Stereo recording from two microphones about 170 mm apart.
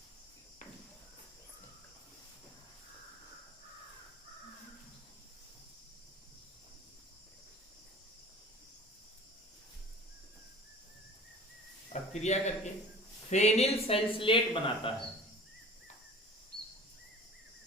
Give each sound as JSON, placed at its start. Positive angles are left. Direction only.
{"t": 12.1, "sound": "speech", "side_deg": 40}